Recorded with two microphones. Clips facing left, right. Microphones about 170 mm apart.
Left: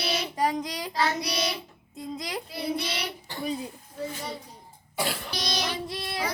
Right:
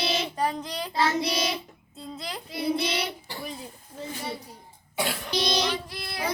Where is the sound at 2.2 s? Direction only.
15° left (ahead or behind).